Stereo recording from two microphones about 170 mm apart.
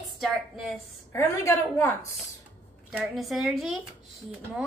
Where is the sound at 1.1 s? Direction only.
15° left (ahead or behind).